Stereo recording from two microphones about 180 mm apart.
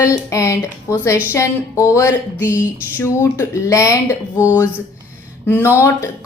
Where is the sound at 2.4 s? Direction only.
10° right (ahead or behind).